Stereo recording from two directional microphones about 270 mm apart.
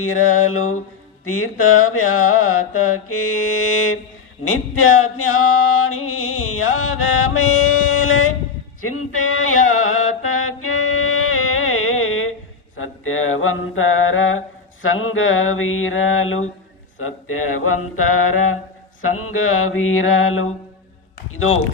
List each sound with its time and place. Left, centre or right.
0.0 s mantra: left
7.3 s a sound: left
8.8 s music: left
9.6 s mantra: left
10.6 s music: left
12.7 s mantra: left
21.2 s speech: left